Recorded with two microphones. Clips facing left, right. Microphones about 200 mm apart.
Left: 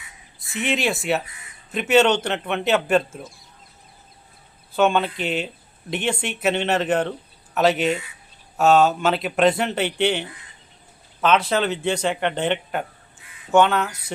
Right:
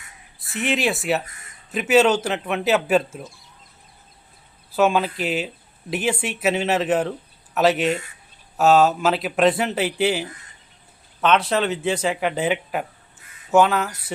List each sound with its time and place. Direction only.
0.3 s speech: centre (ahead or behind)
1.2 s a sound: 45° right (ahead or behind)
1.7 s speech: centre (ahead or behind)
4.7 s speech: 5° right (ahead or behind)